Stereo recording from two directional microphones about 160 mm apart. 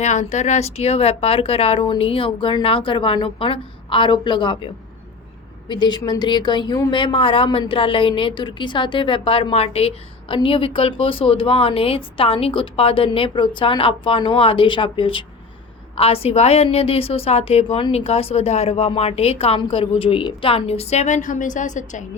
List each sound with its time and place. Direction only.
0.0 s a woman's voice: 45° left (ahead or behind)